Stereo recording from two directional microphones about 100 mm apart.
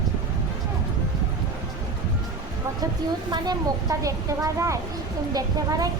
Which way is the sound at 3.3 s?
40° right (ahead or behind).